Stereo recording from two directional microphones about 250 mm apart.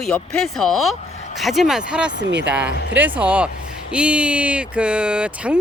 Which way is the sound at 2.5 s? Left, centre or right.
Centre.